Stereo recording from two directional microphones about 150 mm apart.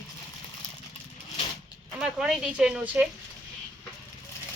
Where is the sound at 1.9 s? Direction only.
5° right (ahead or behind).